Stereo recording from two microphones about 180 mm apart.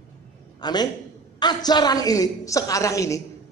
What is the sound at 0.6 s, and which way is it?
A man's voice, 25° left (ahead or behind).